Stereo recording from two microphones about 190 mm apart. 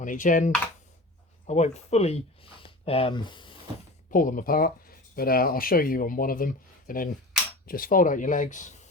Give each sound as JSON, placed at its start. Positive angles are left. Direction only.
{"t": 0.0, "sound": "speech", "side_deg": 45}
{"t": 4.1, "sound": "speech", "side_deg": 45}